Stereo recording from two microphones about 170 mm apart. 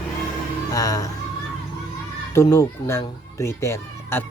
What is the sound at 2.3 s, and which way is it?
Speech, 15° left (ahead or behind).